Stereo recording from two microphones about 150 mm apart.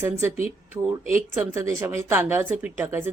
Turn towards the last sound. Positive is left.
turn(degrees=-15)  # may be behind; listen again after turning